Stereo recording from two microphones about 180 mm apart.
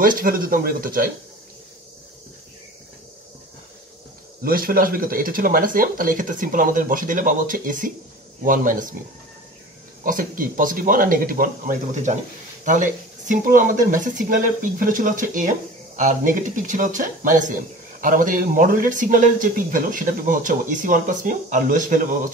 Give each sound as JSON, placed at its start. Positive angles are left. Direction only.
{"t": 0.0, "sound": "speech", "side_deg": -50}
{"t": 4.4, "sound": "speech", "side_deg": -55}
{"t": 10.0, "sound": "speech", "side_deg": -50}
{"t": 13.3, "sound": "speech", "side_deg": -50}